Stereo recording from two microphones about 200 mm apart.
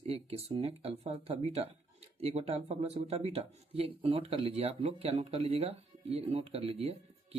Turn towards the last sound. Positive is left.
turn(degrees=-30)  # may be behind; listen again after turning